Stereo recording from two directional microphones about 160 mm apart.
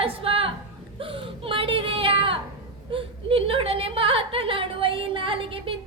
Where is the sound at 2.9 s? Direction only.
35° right (ahead or behind).